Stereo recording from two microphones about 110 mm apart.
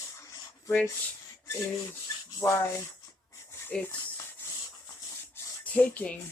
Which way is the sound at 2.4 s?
20° left (ahead or behind).